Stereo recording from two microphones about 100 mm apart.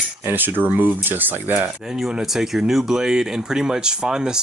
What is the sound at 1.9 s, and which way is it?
Speech, 5° right (ahead or behind).